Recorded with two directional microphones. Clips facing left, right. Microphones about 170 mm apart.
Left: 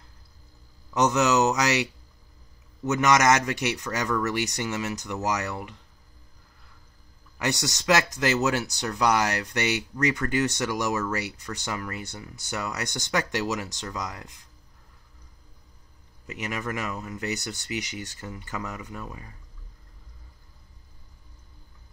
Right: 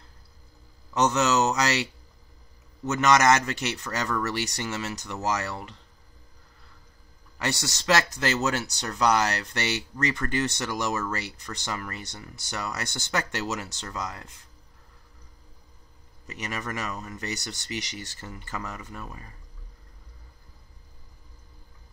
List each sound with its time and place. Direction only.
0.9 s speech: 15° left (ahead or behind)
3.0 s speech: 15° left (ahead or behind)
7.3 s speech: 15° left (ahead or behind)
16.3 s speech: 10° left (ahead or behind)
18.6 s speech: 5° left (ahead or behind)